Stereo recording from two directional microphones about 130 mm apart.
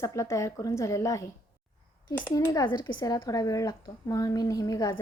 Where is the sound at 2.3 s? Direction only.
30° left (ahead or behind).